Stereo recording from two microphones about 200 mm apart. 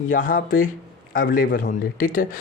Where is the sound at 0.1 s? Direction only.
45° left (ahead or behind).